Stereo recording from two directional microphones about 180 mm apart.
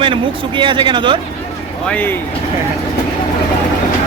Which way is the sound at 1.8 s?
10° left (ahead or behind).